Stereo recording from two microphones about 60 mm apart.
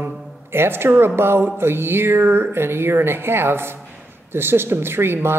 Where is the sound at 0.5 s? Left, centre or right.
Right.